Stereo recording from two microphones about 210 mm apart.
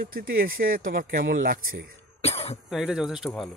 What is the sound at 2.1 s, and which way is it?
Cough, 30° left (ahead or behind).